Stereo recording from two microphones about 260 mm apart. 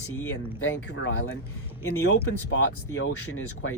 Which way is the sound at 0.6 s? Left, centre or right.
Left.